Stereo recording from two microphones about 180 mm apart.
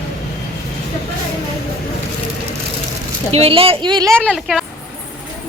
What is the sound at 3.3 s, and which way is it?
Speech, 35° right (ahead or behind).